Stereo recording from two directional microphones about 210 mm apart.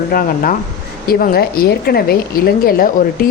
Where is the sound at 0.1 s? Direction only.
45° left (ahead or behind).